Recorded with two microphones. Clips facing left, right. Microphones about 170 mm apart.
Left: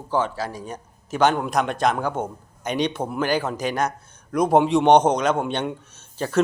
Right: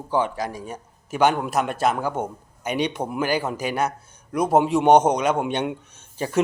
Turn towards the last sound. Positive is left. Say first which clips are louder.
# left 1 dB
turn(degrees=-10)  # may be behind; listen again after turning